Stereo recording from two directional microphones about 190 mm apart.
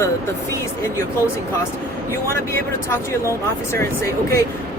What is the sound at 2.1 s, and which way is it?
Speech, 15° left (ahead or behind).